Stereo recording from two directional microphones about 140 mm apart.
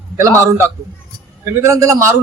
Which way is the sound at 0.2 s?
20° right (ahead or behind).